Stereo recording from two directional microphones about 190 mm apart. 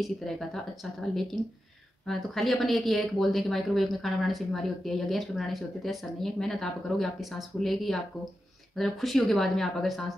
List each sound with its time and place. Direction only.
0.0 s speech: centre (ahead or behind)
1.4 s speech: 20° right (ahead or behind)
2.0 s speech: centre (ahead or behind)